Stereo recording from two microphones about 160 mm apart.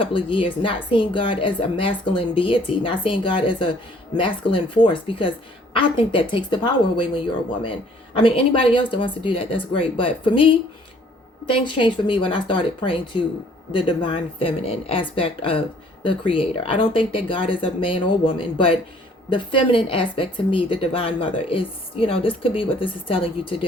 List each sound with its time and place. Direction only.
0.0 s speech: 30° left (ahead or behind)